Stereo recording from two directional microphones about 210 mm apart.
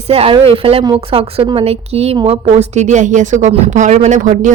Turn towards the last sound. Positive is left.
turn(degrees=-35)  # may be behind; listen again after turning